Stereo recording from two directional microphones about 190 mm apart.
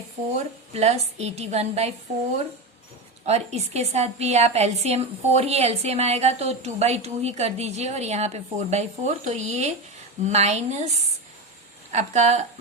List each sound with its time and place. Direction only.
0.3 s a woman's voice: 35° right (ahead or behind)
3.2 s a woman's voice: 35° right (ahead or behind)
11.9 s a woman's voice: 35° right (ahead or behind)